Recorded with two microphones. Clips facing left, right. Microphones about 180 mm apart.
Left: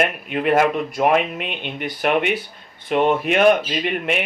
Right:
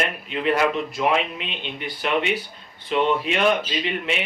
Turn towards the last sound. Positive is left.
turn(degrees=50)  # may be behind; listen again after turning